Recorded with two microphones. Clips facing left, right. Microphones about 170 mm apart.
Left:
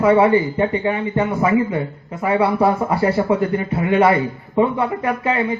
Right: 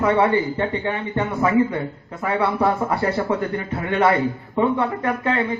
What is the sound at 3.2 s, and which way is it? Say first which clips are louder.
A man's voice: left 5 dB; 20° left (ahead or behind).